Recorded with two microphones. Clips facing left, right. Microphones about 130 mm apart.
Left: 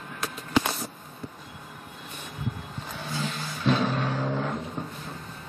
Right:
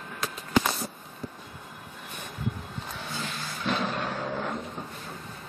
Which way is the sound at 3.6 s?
Centre (ahead or behind).